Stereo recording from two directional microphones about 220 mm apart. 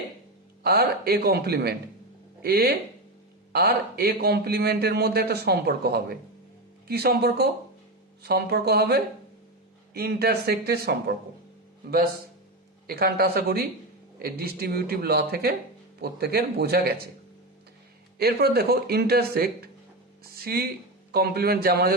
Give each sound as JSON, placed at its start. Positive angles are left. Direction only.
{"t": 0.6, "sound": "a man's voice", "side_deg": -45}
{"t": 12.9, "sound": "a man's voice", "side_deg": -45}
{"t": 18.2, "sound": "a man's voice", "side_deg": -45}